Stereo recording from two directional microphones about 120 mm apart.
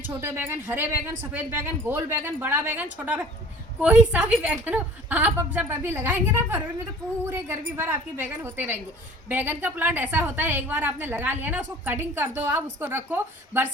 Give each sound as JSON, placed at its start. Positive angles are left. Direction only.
{"t": 0.2, "sound": "a woman's voice", "side_deg": -20}